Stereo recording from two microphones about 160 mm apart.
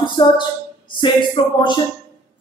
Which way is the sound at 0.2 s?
30° left (ahead or behind).